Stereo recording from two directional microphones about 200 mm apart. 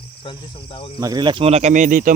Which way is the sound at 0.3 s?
25° left (ahead or behind).